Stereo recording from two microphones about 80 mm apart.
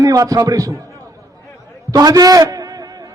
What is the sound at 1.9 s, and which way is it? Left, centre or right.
Speech, right.